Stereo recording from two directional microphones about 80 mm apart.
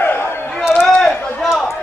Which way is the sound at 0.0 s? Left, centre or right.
Left.